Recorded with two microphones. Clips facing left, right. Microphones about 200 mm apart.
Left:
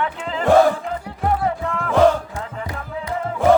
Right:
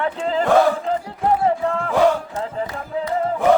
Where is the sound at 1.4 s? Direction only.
30° right (ahead or behind).